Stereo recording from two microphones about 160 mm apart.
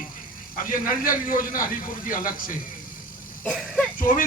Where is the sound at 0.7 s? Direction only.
60° left (ahead or behind).